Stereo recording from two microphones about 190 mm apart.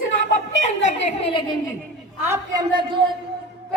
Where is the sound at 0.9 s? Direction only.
35° left (ahead or behind).